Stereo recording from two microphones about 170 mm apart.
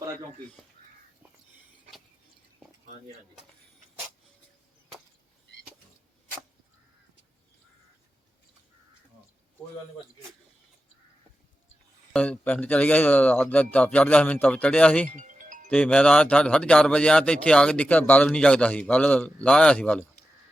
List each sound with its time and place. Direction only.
12.1 s speech: 5° left (ahead or behind)
15.1 s music: 50° right (ahead or behind)
15.7 s speech: 10° left (ahead or behind)